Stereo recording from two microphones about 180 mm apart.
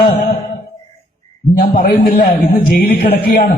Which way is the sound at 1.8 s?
55° left (ahead or behind).